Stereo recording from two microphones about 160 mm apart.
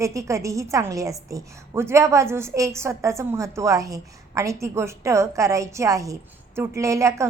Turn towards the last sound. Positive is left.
turn(degrees=-20)  # may be behind; listen again after turning